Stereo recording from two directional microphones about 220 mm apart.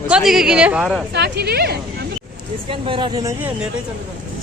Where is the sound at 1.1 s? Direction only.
50° right (ahead or behind).